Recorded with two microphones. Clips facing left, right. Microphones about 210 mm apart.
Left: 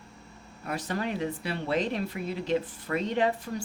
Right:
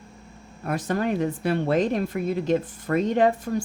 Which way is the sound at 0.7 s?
50° right (ahead or behind).